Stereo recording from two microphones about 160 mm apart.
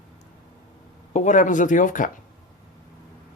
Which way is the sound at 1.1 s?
50° left (ahead or behind).